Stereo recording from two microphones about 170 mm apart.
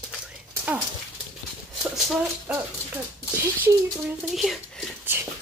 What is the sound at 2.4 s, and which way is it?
Speech, 10° right (ahead or behind).